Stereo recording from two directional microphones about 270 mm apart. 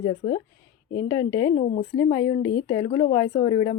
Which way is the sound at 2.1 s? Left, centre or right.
Centre.